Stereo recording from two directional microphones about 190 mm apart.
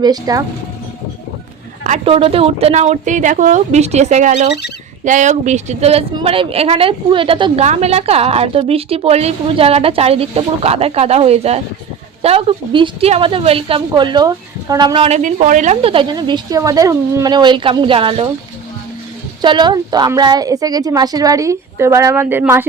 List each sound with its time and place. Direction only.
0.0 s a woman's voice: 20° right (ahead or behind)
1.8 s a woman's voice: 35° right (ahead or behind)
15.2 s a woman's voice: 40° right (ahead or behind)
19.4 s a woman's voice: 25° right (ahead or behind)